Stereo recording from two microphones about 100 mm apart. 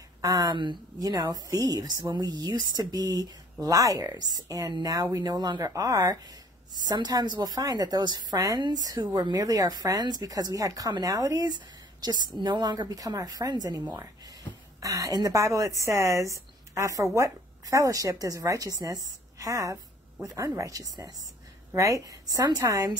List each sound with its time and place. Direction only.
0.2 s a woman's voice: 35° right (ahead or behind)
5.6 s a woman's voice: 35° right (ahead or behind)
12.0 s a woman's voice: 50° right (ahead or behind)